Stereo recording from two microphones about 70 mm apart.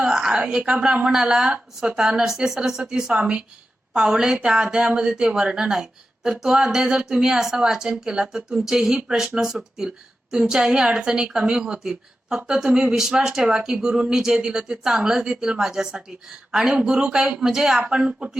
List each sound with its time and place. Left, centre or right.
0.1 s speech: centre
17.8 s speech: centre